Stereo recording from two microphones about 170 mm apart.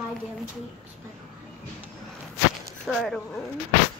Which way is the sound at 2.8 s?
Centre (ahead or behind).